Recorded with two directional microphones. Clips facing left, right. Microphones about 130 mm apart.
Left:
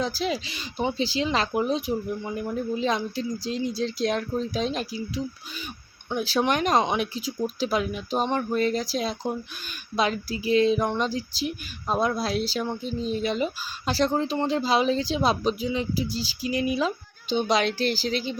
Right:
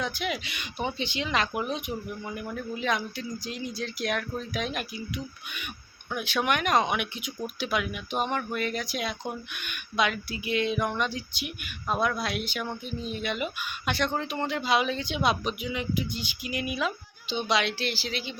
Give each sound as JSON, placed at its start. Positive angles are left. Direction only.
{"t": 0.0, "sound": "speech", "side_deg": 30}
{"t": 17.2, "sound": "speech", "side_deg": 45}